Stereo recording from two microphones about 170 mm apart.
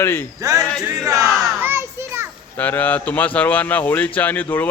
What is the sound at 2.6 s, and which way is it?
A man's voice, 10° left (ahead or behind).